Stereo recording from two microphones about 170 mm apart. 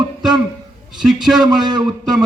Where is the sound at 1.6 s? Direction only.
25° right (ahead or behind).